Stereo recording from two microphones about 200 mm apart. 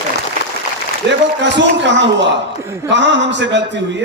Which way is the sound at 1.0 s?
60° right (ahead or behind).